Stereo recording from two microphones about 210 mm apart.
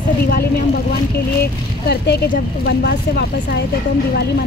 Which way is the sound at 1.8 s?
50° left (ahead or behind).